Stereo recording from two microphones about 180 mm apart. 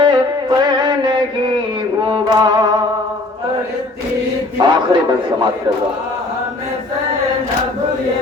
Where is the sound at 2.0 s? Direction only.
25° right (ahead or behind).